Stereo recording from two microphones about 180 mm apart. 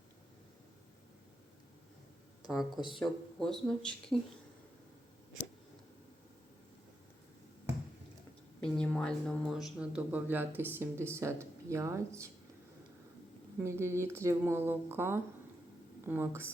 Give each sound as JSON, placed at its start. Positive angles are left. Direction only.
{"t": 2.5, "sound": "speech", "side_deg": 0}
{"t": 8.6, "sound": "speech", "side_deg": 5}
{"t": 13.7, "sound": "speech", "side_deg": -15}